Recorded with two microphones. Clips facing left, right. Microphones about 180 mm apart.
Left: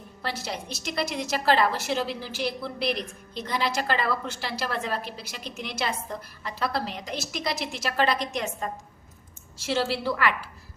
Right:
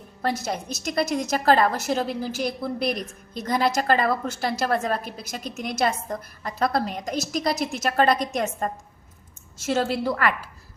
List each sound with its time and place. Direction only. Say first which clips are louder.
0.2 s a woman's voice: right 6 dB; 45° right (ahead or behind)